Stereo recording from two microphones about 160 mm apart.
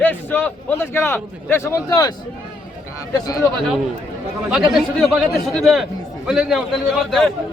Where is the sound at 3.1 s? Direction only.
25° left (ahead or behind).